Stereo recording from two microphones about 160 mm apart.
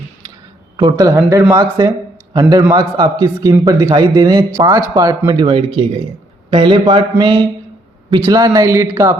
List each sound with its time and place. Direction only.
0.8 s a man's voice: 25° right (ahead or behind)